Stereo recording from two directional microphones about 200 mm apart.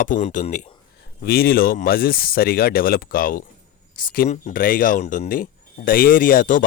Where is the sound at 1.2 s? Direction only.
50° left (ahead or behind).